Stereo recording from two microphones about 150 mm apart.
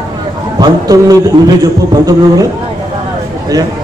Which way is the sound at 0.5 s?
25° right (ahead or behind).